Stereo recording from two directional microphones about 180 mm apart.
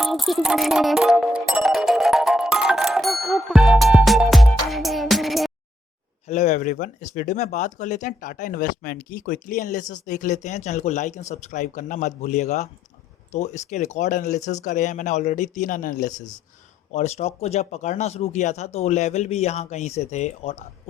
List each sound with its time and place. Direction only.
0.0 s music: centre (ahead or behind)
6.2 s speech: 40° left (ahead or behind)
16.9 s speech: 35° left (ahead or behind)